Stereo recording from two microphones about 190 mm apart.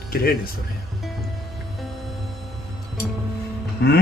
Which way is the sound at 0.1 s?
50° left (ahead or behind).